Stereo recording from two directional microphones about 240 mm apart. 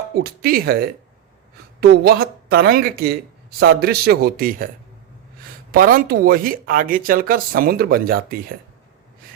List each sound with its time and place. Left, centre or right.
0.2 s speech: right
5.7 s speech: right